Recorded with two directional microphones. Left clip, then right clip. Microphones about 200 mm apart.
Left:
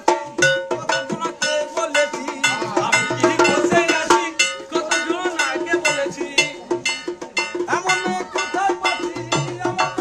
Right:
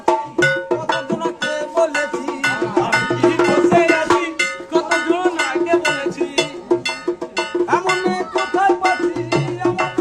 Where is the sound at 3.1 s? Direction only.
15° right (ahead or behind).